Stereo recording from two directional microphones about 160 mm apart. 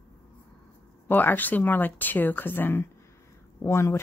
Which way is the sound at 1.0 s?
10° left (ahead or behind).